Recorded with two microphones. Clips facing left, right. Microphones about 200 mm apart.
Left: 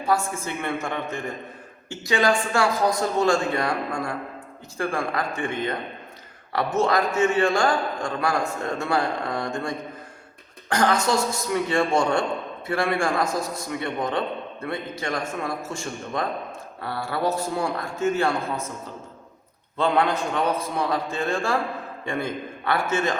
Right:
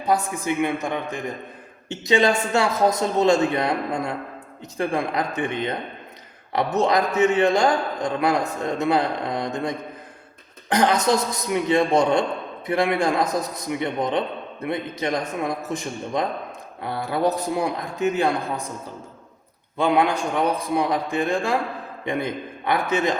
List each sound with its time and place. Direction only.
0.0 s a man's voice: 20° right (ahead or behind)
19.7 s a man's voice: 15° right (ahead or behind)